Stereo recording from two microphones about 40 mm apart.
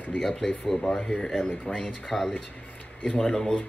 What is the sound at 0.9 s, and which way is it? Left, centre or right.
Speech, centre.